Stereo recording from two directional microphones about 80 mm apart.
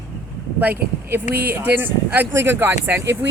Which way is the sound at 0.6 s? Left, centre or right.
Right.